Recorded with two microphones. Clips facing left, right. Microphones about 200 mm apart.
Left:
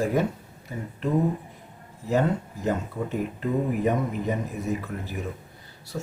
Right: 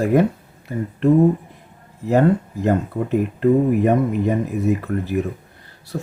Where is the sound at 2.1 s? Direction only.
60° right (ahead or behind).